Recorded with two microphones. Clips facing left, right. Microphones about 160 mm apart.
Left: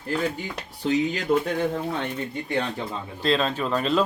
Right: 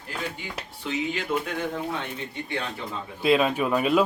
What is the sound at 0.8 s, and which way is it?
Speech, 35° left (ahead or behind).